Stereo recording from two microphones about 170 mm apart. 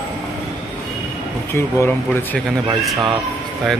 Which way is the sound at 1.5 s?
15° left (ahead or behind).